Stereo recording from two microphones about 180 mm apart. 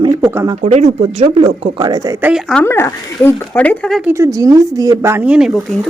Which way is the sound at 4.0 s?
10° right (ahead or behind).